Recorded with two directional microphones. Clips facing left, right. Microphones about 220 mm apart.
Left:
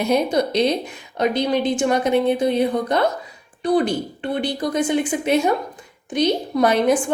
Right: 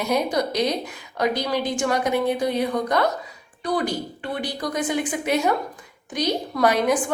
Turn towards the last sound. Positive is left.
turn(degrees=25)  # may be behind; listen again after turning